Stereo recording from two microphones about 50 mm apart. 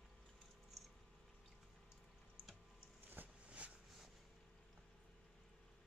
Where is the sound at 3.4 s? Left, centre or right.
Right.